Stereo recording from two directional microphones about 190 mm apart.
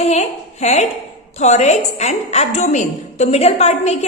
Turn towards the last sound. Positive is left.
turn(degrees=35)  # may be behind; listen again after turning